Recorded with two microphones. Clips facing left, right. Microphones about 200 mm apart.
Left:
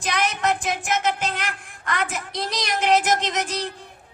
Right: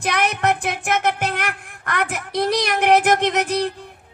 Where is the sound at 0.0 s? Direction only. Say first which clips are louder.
Right 3 dB; 60° right (ahead or behind).